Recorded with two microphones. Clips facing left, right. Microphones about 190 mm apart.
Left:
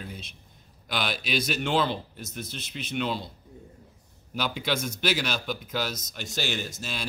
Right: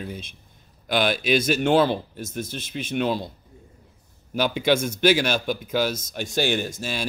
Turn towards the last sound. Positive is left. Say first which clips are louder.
# right 8 dB
turn(degrees=-50)  # may be behind; listen again after turning